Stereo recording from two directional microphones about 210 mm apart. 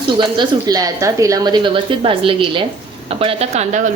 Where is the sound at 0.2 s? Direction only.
20° right (ahead or behind).